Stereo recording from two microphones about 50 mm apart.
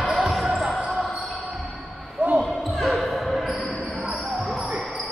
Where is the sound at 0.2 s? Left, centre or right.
Centre.